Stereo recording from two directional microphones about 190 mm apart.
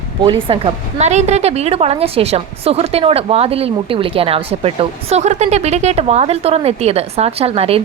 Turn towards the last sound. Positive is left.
turn(degrees=-30)  # may be behind; listen again after turning